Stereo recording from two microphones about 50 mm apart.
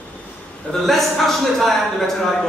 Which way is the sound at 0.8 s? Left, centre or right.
Centre.